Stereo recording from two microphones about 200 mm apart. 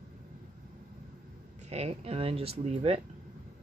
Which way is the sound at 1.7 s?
30° right (ahead or behind).